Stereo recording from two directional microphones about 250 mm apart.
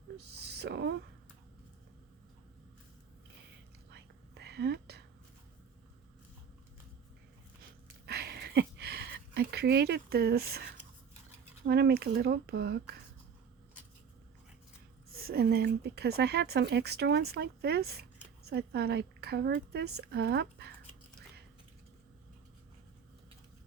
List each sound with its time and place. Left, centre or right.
0.2 s speech: right
3.9 s whispering: right
7.6 s a sound: right
11.6 s speech: right
15.1 s speech: right